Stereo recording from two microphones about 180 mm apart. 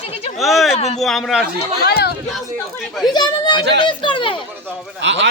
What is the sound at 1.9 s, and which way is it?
Speech, 60° left (ahead or behind).